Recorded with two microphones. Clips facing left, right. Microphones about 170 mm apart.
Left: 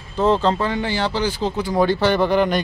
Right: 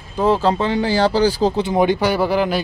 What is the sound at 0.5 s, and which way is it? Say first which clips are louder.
Speech: right 4 dB; 25° right (ahead or behind).